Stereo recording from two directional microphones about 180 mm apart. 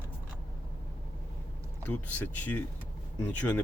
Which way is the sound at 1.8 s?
10° left (ahead or behind).